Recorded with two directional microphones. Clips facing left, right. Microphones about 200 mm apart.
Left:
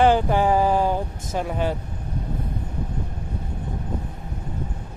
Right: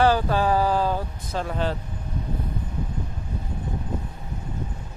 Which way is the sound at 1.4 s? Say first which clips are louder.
Left 2 dB; 10° left (ahead or behind).